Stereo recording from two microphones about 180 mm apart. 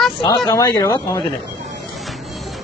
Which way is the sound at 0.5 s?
20° left (ahead or behind).